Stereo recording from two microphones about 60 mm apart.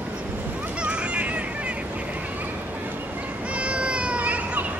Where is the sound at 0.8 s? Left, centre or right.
Centre.